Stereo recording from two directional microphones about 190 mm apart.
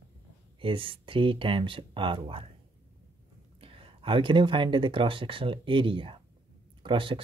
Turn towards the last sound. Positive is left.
turn(degrees=-25)  # may be behind; listen again after turning